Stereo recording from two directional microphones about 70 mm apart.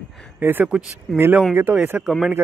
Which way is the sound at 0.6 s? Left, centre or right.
Centre.